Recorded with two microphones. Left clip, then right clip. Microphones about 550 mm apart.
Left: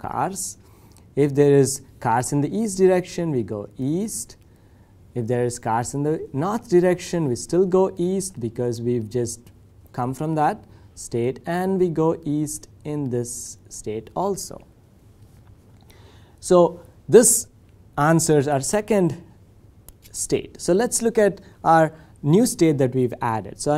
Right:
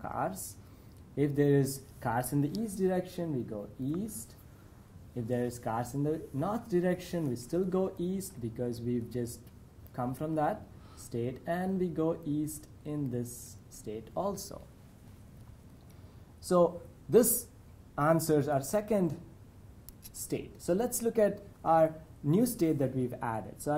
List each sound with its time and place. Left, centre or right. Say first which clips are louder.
0.0 s a sound: left 10 dB; left
1.1 s speech: left 12 dB; left
5.1 s speech: left 11 dB; left
16.3 s a woman's voice: left 11 dB; left